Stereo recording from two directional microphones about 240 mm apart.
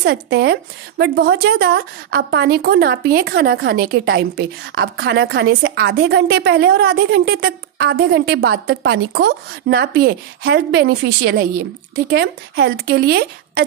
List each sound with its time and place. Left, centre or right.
0.0 s a woman's voice: right